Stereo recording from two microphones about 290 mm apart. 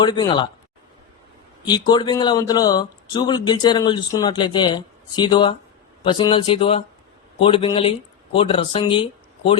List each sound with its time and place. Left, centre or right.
0.0 s speech: centre
1.6 s speech: centre